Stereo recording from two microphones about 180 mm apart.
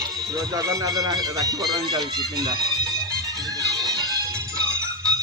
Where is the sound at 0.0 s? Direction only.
20° right (ahead or behind).